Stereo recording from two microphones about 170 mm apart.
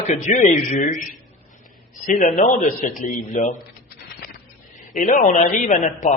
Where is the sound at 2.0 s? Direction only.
50° left (ahead or behind).